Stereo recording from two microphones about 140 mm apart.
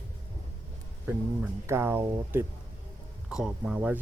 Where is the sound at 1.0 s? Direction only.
15° right (ahead or behind).